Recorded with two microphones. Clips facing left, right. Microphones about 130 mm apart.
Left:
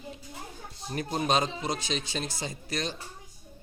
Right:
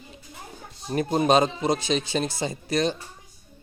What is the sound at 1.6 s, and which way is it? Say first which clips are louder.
Speech: right 8 dB; centre (ahead or behind).